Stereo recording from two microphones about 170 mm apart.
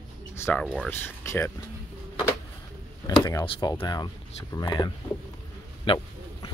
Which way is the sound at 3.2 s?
25° left (ahead or behind).